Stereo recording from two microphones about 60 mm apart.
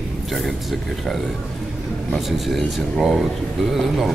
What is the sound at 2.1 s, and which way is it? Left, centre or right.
Speech, centre.